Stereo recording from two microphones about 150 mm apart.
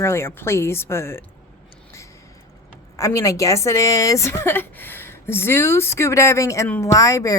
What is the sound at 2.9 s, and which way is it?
A woman's voice, 20° left (ahead or behind).